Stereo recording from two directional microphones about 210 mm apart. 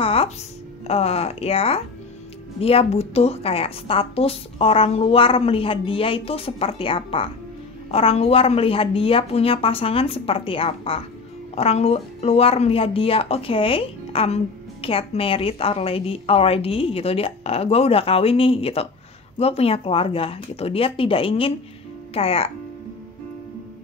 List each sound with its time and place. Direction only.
0.0 s music: 25° left (ahead or behind)
0.8 s speech: 30° left (ahead or behind)